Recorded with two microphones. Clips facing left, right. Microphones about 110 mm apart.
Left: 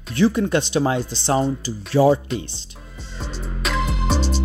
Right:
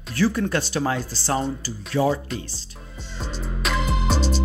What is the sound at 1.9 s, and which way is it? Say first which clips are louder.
Speech: left 6 dB; 30° left (ahead or behind).